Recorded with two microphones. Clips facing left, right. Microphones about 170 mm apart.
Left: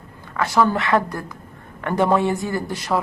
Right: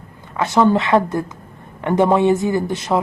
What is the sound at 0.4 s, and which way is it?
Speech, 20° right (ahead or behind).